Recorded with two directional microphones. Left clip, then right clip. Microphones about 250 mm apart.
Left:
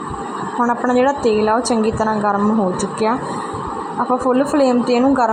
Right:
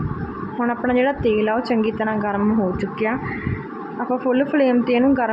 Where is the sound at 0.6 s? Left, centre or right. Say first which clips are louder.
Left 4 dB; centre.